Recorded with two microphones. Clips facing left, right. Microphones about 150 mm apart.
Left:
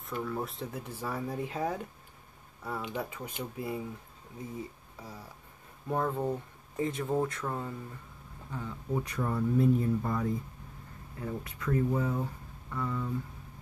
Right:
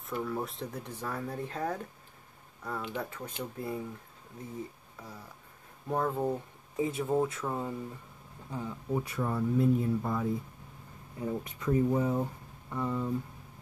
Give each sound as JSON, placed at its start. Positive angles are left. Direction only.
{"t": 0.0, "sound": "speech", "side_deg": 0}
{"t": 5.9, "sound": "speech", "side_deg": 0}
{"t": 8.5, "sound": "speech", "side_deg": -20}
{"t": 8.9, "sound": "speech", "side_deg": -5}
{"t": 11.1, "sound": "speech", "side_deg": -20}